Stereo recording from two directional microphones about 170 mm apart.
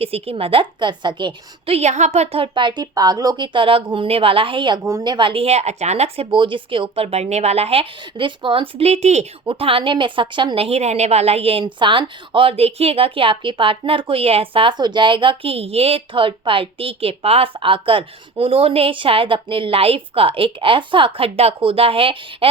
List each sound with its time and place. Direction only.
0.0 s speech: 35° right (ahead or behind)
4.8 s speech: 15° right (ahead or behind); by 22.4 s 30° right (ahead or behind)